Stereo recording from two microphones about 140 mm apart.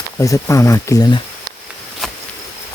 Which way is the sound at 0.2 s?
20° left (ahead or behind).